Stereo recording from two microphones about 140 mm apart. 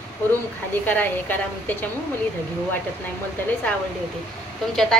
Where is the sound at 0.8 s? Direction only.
15° left (ahead or behind).